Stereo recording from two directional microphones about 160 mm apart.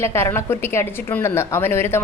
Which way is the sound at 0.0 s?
15° left (ahead or behind).